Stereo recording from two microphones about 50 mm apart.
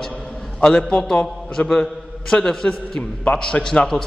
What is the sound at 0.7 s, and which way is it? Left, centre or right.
A man's voice, centre.